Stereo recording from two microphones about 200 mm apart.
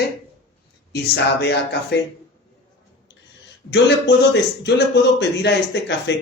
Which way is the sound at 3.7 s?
60° left (ahead or behind).